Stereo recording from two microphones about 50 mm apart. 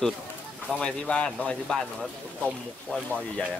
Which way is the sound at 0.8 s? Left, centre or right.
Left.